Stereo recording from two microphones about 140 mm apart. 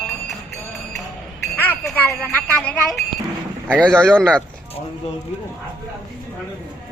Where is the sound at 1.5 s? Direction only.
15° left (ahead or behind).